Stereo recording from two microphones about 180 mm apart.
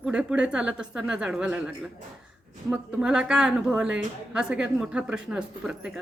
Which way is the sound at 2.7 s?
5° right (ahead or behind).